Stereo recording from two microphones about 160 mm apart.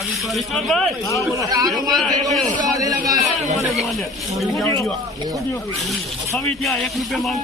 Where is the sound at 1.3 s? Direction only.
20° right (ahead or behind).